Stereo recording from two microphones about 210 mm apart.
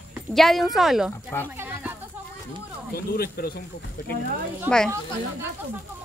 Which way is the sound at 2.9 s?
45° left (ahead or behind).